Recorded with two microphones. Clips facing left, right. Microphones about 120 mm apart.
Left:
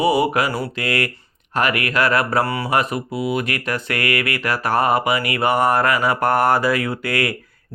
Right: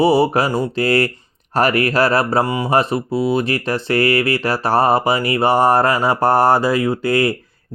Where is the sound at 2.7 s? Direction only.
30° right (ahead or behind).